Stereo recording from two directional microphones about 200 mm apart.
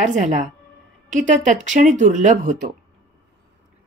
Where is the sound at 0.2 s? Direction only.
40° right (ahead or behind).